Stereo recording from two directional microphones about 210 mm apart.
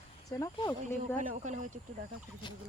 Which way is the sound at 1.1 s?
40° right (ahead or behind).